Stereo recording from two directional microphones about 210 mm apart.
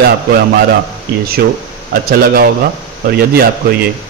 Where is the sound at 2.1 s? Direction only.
45° right (ahead or behind).